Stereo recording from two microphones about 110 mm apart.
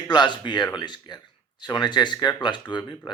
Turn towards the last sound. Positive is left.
turn(degrees=45)  # may be behind; listen again after turning